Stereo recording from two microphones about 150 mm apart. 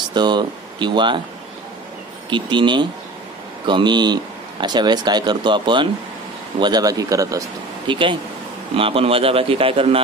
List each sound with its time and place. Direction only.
0.1 s speech: 30° right (ahead or behind)
2.2 s a man's voice: 30° right (ahead or behind)
7.9 s a man's voice: 35° right (ahead or behind)